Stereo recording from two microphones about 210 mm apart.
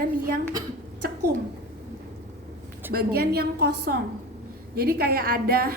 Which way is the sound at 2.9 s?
50° right (ahead or behind).